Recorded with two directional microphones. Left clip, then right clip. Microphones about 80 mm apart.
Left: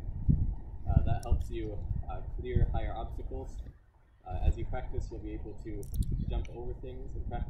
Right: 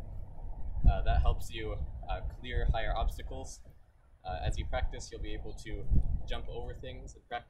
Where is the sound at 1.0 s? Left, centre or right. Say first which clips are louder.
Right 4 dB; right.